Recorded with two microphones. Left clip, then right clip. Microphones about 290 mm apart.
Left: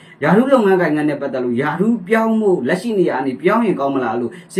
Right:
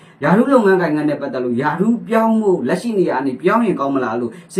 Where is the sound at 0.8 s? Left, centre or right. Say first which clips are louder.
Left 1 dB; centre.